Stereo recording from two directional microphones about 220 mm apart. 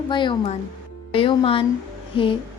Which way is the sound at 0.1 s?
20° left (ahead or behind).